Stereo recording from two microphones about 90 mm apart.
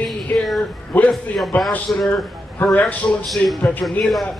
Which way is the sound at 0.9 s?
15° left (ahead or behind).